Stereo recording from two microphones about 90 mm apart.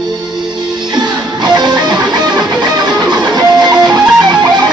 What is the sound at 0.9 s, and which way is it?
Music, 50° right (ahead or behind).